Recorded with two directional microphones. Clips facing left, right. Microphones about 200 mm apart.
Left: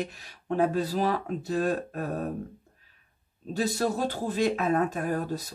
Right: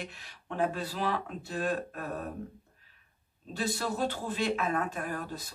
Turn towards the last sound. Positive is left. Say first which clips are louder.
# left 7 dB
turn(degrees=40)  # may be behind; listen again after turning